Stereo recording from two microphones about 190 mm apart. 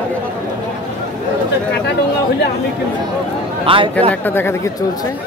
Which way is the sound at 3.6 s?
25° right (ahead or behind).